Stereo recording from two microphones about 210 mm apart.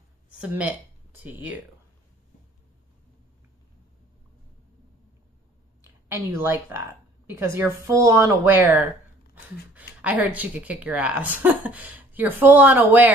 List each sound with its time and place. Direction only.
0.4 s speech: 5° right (ahead or behind)
5.9 s speech: 10° right (ahead or behind)
10.0 s speech: 5° right (ahead or behind)